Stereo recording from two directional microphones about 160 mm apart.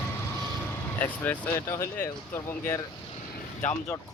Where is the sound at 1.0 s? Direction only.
10° left (ahead or behind).